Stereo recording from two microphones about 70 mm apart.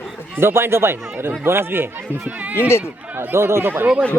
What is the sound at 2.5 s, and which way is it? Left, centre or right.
Speech, left.